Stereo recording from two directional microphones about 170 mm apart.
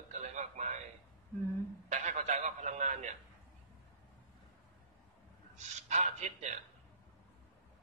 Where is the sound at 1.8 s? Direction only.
45° right (ahead or behind).